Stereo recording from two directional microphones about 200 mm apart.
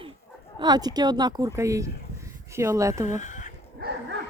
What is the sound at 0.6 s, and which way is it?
A woman's voice, 20° right (ahead or behind).